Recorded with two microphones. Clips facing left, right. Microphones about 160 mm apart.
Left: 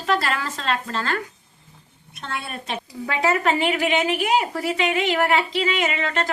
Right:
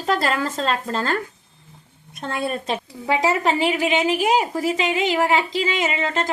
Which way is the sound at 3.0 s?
25° right (ahead or behind).